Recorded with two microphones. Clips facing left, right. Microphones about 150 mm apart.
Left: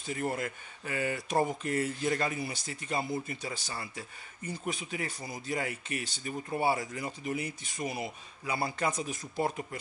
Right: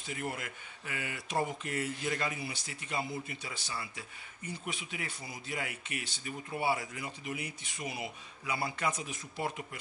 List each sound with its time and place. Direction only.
0.1 s speech: 35° left (ahead or behind)